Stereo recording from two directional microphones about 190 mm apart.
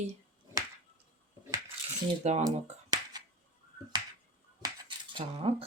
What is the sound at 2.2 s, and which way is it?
Speech, 35° right (ahead or behind).